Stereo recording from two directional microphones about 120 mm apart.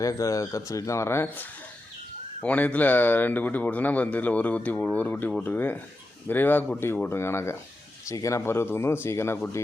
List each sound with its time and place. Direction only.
0.0 s speech: 30° left (ahead or behind)